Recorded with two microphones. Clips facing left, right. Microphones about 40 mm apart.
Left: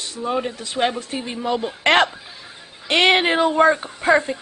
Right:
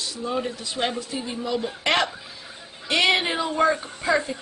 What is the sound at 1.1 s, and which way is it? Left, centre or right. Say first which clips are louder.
Speech: left 4 dB; left.